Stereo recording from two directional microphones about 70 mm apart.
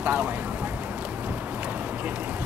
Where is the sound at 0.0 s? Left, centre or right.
Right.